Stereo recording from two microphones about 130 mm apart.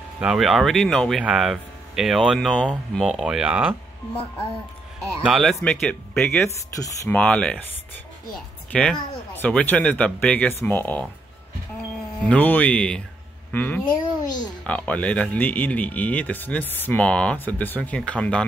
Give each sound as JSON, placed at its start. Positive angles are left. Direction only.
{"t": 0.2, "sound": "speech", "side_deg": -5}
{"t": 5.2, "sound": "speech", "side_deg": 0}
{"t": 8.7, "sound": "speech", "side_deg": 10}
{"t": 12.3, "sound": "speech", "side_deg": 15}
{"t": 13.8, "sound": "a child's voice", "side_deg": 30}
{"t": 14.6, "sound": "speech", "side_deg": 10}